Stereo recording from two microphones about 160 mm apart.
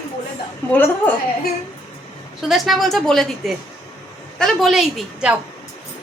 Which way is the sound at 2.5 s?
Centre (ahead or behind).